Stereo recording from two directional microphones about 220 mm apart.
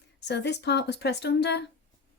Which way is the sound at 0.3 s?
50° left (ahead or behind).